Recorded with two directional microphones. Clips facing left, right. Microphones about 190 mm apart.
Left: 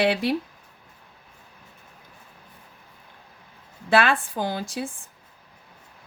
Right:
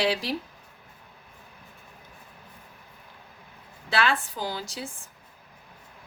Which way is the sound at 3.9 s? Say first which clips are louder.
Left 5 dB; 55° left (ahead or behind).